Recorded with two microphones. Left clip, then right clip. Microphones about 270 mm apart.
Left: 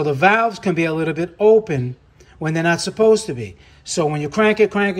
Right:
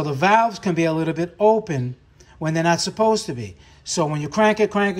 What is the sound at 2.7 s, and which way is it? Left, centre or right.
A man's voice, centre.